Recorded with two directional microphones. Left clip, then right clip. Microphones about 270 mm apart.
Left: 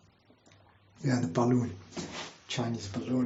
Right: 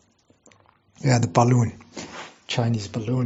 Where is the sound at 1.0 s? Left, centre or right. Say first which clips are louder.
Right 10 dB; right.